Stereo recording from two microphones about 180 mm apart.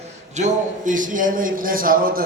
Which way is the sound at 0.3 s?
45° right (ahead or behind).